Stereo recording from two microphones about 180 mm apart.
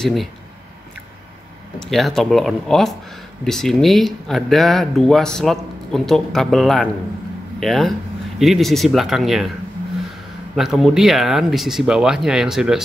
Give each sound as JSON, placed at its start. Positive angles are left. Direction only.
{"t": 0.0, "sound": "speech", "side_deg": 0}
{"t": 1.8, "sound": "speech", "side_deg": 0}
{"t": 10.5, "sound": "speech", "side_deg": 0}